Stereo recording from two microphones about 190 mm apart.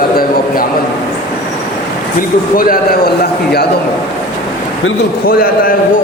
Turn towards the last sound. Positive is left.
turn(degrees=50)  # may be behind; listen again after turning